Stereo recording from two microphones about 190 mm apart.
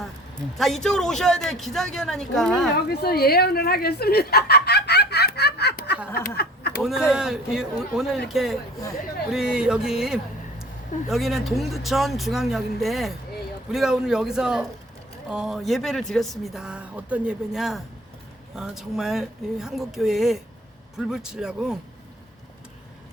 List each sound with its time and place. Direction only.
0.6 s speech: centre (ahead or behind)
2.9 s speech: 55° left (ahead or behind)
6.1 s a sound: 55° left (ahead or behind)
7.1 s speech: 5° right (ahead or behind)